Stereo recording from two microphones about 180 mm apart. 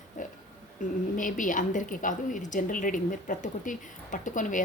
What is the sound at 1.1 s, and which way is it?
A woman's voice, 45° left (ahead or behind).